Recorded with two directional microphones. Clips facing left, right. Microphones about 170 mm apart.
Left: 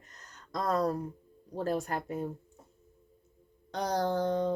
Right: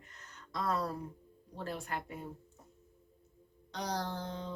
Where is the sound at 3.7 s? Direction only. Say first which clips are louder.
Left 8 dB; 50° left (ahead or behind).